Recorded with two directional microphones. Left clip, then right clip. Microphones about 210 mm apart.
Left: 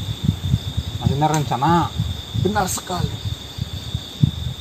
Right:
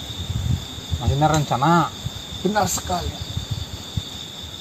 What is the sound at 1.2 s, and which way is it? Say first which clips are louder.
Speech: even; 15° right (ahead or behind).